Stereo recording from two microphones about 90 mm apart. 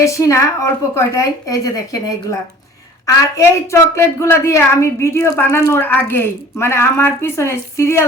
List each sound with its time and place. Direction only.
0.0 s a woman's voice: 35° left (ahead or behind)
3.3 s a woman's voice: 30° left (ahead or behind)